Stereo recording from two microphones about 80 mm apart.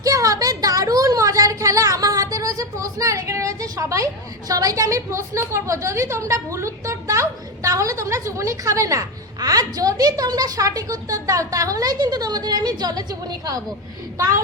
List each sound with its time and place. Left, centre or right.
0.0 s a child's voice: right